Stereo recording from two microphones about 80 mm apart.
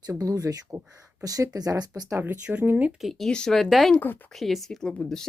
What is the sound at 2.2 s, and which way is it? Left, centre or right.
Speech, right.